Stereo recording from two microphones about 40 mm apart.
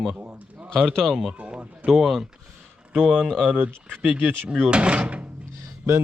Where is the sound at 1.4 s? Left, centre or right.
Right.